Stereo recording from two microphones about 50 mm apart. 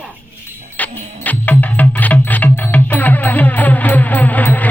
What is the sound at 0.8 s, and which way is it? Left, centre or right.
Music, left.